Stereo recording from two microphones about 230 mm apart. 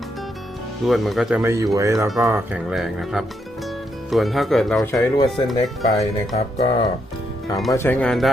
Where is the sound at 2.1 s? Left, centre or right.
Centre.